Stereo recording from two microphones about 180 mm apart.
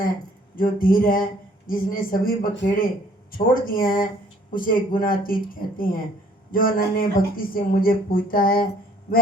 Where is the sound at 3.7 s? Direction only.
50° left (ahead or behind).